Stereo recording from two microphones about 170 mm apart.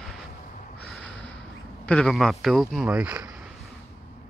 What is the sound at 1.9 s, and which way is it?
Speech, 5° left (ahead or behind).